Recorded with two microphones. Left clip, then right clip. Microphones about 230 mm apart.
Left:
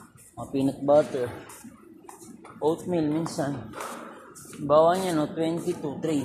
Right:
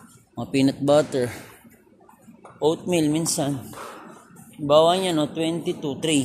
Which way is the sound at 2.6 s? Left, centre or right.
Right.